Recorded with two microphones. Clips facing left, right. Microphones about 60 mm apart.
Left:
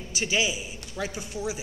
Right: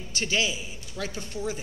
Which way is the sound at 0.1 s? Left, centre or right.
Centre.